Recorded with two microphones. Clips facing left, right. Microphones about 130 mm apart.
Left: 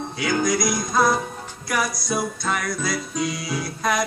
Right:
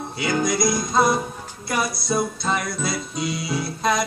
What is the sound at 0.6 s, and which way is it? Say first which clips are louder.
Music: right 1 dB; 25° right (ahead or behind).